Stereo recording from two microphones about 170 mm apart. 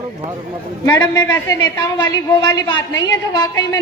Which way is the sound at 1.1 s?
20° left (ahead or behind).